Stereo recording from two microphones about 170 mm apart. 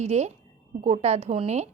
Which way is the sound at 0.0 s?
40° right (ahead or behind).